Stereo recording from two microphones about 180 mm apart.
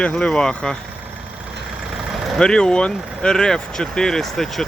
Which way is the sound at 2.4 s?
5° left (ahead or behind).